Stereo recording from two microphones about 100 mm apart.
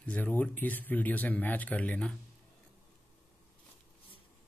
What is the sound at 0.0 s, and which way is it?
Speech, 15° left (ahead or behind).